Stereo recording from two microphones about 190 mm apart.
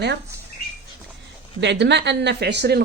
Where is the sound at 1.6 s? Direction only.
65° right (ahead or behind).